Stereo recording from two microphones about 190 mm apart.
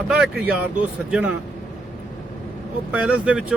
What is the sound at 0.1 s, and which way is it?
Speech, 5° right (ahead or behind).